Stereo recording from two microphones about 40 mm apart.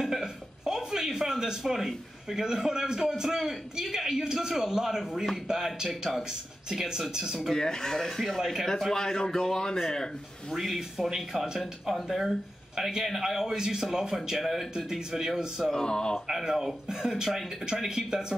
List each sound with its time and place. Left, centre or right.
0.0 s speech: centre
6.7 s speech: centre
7.5 s speech: centre
10.5 s speech: centre
14.9 s speech: centre
15.7 s speech: left
16.3 s speech: centre